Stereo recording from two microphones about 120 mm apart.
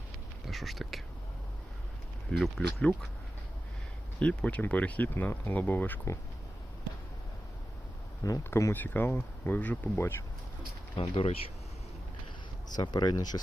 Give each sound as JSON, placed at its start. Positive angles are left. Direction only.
{"t": 0.4, "sound": "speech", "side_deg": 0}
{"t": 2.4, "sound": "speech", "side_deg": 0}
{"t": 4.2, "sound": "speech", "side_deg": 10}
{"t": 8.2, "sound": "speech", "side_deg": 25}
{"t": 11.1, "sound": "speech", "side_deg": 50}
{"t": 12.7, "sound": "speech", "side_deg": 35}